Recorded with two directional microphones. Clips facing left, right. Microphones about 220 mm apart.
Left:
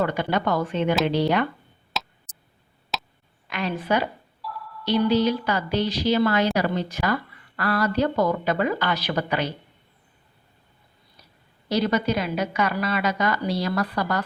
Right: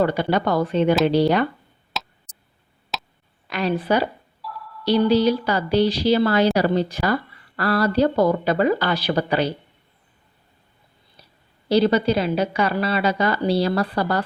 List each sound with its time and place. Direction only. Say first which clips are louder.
0.0 s a woman's voice: right 4 dB; 35° right (ahead or behind)
2.0 s tick: even; centre (ahead or behind)
2.9 s a sound: even; centre (ahead or behind)
3.5 s a woman's voice: right 4 dB; 35° right (ahead or behind)
4.4 s a sound: even; centre (ahead or behind)
5.0 s a woman's voice: right 2 dB; 35° right (ahead or behind)
11.7 s a woman's voice: right 5 dB; 30° right (ahead or behind)